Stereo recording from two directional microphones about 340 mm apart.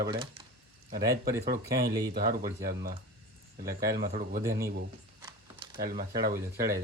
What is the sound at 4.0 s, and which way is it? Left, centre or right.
Speech, right.